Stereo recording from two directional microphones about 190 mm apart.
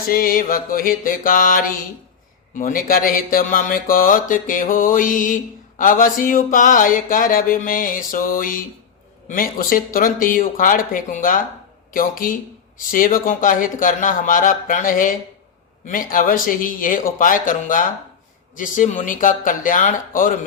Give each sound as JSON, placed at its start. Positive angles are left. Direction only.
{"t": 0.1, "sound": "mantra", "side_deg": 50}